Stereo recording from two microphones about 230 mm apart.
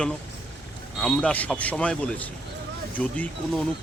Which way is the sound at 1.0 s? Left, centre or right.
Centre.